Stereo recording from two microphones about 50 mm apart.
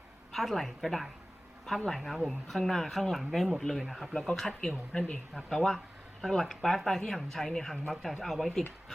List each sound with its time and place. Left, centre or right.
0.3 s speech: centre
5.5 s speech: centre